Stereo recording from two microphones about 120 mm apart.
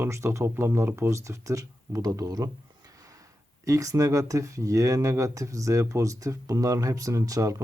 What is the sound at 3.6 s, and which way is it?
Speech, 30° right (ahead or behind).